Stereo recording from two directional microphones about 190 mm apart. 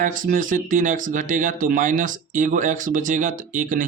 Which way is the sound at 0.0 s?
45° right (ahead or behind).